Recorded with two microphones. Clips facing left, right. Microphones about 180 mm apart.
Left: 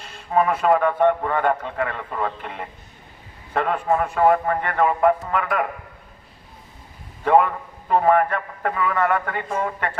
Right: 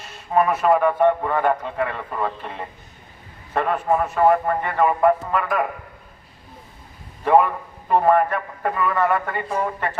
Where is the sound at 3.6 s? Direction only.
10° right (ahead or behind).